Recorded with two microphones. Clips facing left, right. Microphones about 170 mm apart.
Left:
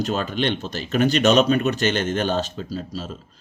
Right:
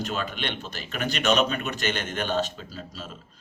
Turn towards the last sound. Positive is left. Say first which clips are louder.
# left 9 dB
turn(degrees=35)  # may be behind; listen again after turning